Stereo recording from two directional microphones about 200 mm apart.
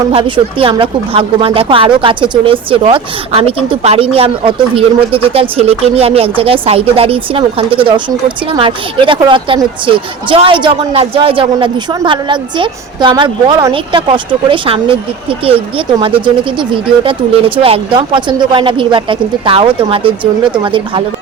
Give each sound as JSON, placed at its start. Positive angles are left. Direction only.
{"t": 0.1, "sound": "speech", "side_deg": -25}